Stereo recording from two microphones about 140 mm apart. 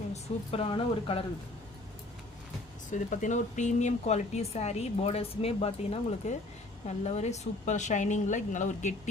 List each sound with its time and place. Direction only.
0.1 s speech: 45° left (ahead or behind)
2.9 s a woman's voice: 60° left (ahead or behind)